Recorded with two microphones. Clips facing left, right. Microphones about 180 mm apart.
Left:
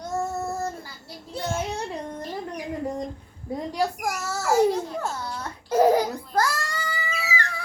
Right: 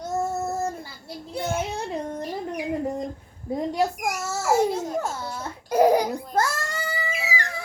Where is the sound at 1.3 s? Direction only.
10° right (ahead or behind).